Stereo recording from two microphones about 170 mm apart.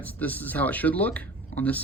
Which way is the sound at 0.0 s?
10° left (ahead or behind).